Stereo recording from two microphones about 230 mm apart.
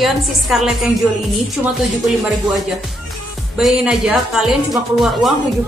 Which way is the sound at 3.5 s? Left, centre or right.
Centre.